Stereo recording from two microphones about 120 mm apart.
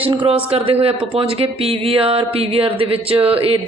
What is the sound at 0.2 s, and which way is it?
Speech, 50° right (ahead or behind).